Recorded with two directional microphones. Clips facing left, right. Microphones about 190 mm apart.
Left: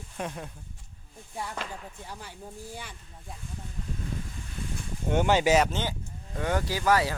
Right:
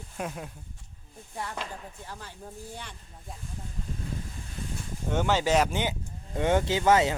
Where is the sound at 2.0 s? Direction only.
15° left (ahead or behind).